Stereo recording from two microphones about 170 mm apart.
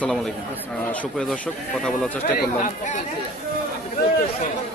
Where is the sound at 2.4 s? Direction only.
50° left (ahead or behind).